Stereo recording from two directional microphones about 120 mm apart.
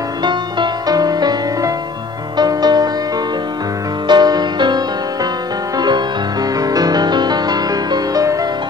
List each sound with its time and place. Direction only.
0.2 s music: 40° right (ahead or behind)
4.1 s music: 35° right (ahead or behind)